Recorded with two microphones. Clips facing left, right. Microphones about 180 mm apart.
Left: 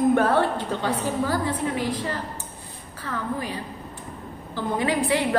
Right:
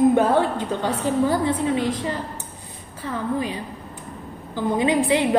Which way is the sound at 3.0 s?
20° right (ahead or behind).